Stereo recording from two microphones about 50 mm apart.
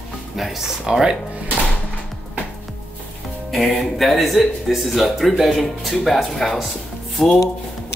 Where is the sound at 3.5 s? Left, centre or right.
Centre.